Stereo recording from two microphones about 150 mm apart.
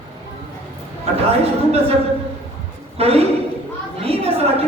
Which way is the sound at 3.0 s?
40° right (ahead or behind).